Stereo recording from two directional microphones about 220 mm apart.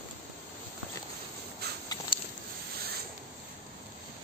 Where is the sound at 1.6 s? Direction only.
45° right (ahead or behind).